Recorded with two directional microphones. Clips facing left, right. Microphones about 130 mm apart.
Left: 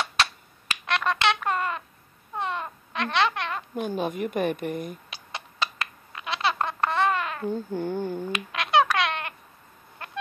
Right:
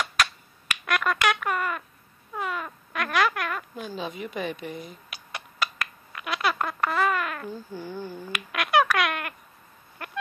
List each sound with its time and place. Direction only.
0.0 s a sound: 30° left (ahead or behind)
2.3 s speech: 30° left (ahead or behind)
3.8 s a woman's voice: 55° left (ahead or behind)
5.1 s a sound: 25° left (ahead or behind)
7.5 s a child's voice: 55° left (ahead or behind)
8.2 s speech: 25° left (ahead or behind)
10.0 s chicken: 25° left (ahead or behind)